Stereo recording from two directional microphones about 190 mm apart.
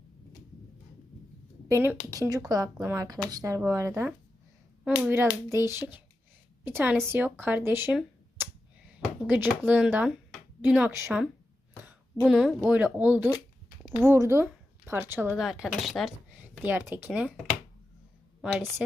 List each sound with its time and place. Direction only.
1.6 s a woman's voice: 15° right (ahead or behind)
8.4 s a sound: 10° right (ahead or behind)
9.2 s a woman's voice: 10° right (ahead or behind)
18.4 s speech: 5° right (ahead or behind)